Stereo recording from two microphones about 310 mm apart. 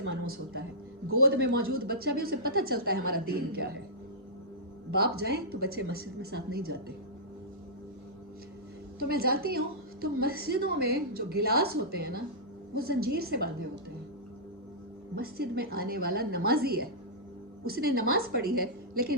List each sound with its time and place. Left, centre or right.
0.0 s a woman's voice: right
4.9 s a woman's voice: right
9.0 s a woman's voice: right
15.1 s speech: right